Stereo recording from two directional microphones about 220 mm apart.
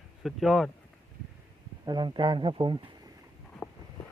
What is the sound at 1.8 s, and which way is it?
Speech, 20° right (ahead or behind).